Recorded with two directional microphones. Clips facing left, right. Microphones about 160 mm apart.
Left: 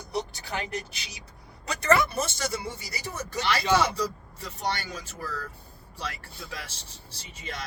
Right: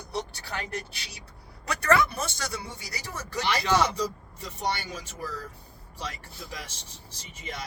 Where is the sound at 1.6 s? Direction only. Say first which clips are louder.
Even; 25° left (ahead or behind).